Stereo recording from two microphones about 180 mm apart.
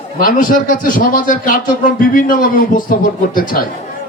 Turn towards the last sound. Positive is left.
turn(degrees=50)  # may be behind; listen again after turning